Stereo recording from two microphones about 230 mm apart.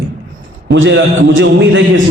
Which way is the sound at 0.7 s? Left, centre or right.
Right.